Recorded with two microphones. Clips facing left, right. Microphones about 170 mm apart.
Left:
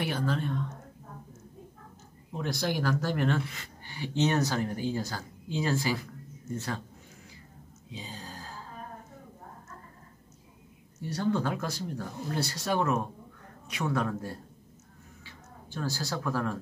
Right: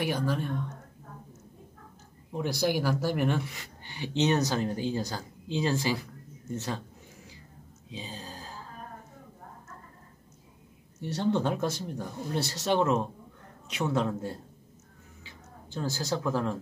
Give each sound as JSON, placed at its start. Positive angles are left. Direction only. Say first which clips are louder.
{"t": 0.0, "sound": "a woman's voice", "louder": "right 1 dB", "side_deg": -10}
{"t": 2.3, "sound": "speech", "louder": "right 3 dB", "side_deg": -10}
{"t": 7.9, "sound": "a sound", "louder": "right 2 dB", "side_deg": -15}
{"t": 11.1, "sound": "speech", "louder": "right 2 dB", "side_deg": -25}